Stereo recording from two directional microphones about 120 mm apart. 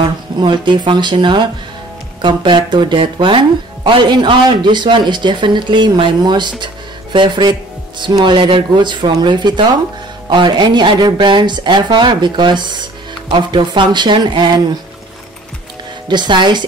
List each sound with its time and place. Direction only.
0.0 s speech: 40° right (ahead or behind)
16.1 s speech: 40° right (ahead or behind)